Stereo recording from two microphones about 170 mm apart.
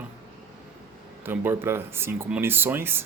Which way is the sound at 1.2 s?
15° right (ahead or behind).